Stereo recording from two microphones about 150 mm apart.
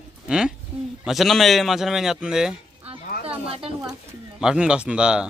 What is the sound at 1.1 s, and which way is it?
Speech, centre (ahead or behind).